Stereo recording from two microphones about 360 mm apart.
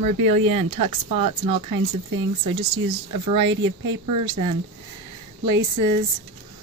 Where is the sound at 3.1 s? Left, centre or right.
Right.